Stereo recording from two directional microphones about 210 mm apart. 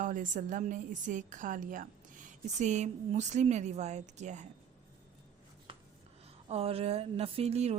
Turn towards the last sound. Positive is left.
turn(degrees=-30)  # may be behind; listen again after turning